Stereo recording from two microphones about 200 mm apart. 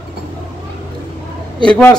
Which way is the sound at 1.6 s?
5° left (ahead or behind).